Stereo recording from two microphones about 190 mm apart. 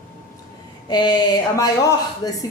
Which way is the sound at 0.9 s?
25° left (ahead or behind).